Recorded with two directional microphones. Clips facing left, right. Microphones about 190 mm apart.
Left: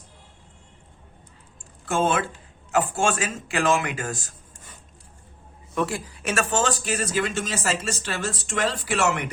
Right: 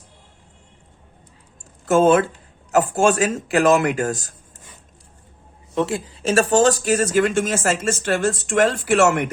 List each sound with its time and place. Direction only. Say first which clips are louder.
1.8 s speech: right 9 dB; 40° right (ahead or behind)
5.7 s speech: right 4 dB; 25° right (ahead or behind); by 9.3 s 50° right (ahead or behind)